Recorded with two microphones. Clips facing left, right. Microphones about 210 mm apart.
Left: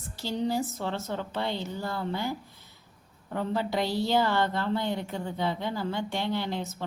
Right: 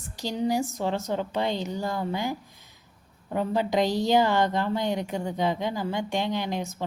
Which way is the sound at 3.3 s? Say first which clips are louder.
Right 4 dB; 15° right (ahead or behind).